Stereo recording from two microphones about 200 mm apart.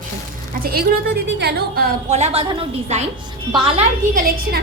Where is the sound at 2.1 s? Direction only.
35° right (ahead or behind).